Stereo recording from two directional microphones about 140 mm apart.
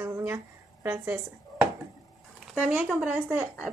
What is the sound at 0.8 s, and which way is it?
Speech, 20° right (ahead or behind).